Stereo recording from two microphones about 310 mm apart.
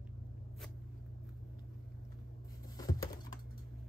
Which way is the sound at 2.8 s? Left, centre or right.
Centre.